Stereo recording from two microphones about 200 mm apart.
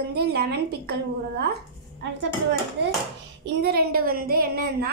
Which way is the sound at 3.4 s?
50° right (ahead or behind).